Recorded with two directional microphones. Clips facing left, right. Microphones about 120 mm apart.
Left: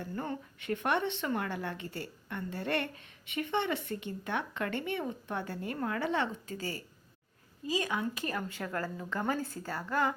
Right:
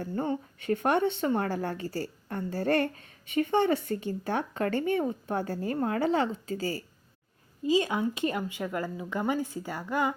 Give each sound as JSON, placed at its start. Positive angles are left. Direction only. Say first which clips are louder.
{"t": 0.1, "sound": "speech", "louder": "right 7 dB", "side_deg": -25}
{"t": 0.6, "sound": "a woman's voice", "louder": "right 5 dB", "side_deg": -40}
{"t": 8.4, "sound": "speech", "louder": "right 4 dB", "side_deg": -15}